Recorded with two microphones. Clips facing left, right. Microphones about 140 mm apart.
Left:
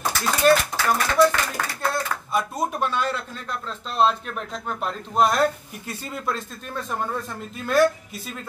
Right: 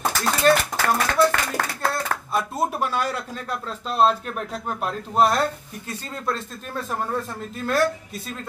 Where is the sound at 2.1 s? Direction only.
55° right (ahead or behind).